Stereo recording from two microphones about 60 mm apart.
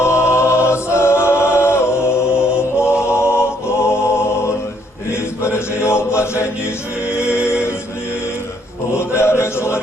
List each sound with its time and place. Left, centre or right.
0.0 s a capella: left
2.6 s music: left
5.8 s chant: left
8.9 s chant: left